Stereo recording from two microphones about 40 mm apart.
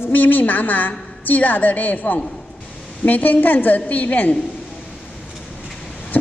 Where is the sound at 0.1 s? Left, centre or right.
Left.